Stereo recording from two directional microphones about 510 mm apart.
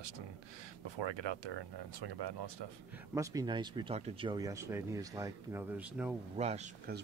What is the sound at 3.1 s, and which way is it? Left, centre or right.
Speech, centre.